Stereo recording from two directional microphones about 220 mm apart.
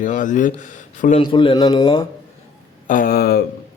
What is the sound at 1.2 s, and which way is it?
Speech, 25° left (ahead or behind).